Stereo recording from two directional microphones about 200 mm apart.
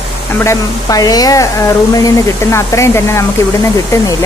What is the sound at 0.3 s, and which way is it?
Speech, 15° left (ahead or behind).